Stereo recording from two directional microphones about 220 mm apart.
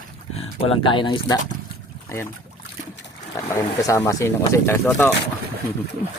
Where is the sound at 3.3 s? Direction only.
15° left (ahead or behind).